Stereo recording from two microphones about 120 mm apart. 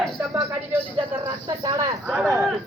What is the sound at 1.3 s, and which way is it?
Speech, 35° right (ahead or behind).